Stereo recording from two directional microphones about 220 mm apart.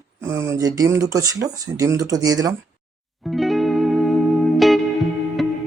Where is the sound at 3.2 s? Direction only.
Centre (ahead or behind).